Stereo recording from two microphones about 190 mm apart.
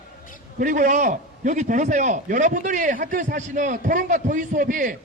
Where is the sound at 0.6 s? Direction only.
45° right (ahead or behind).